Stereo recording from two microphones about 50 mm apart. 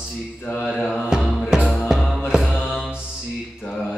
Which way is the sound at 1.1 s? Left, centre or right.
Centre.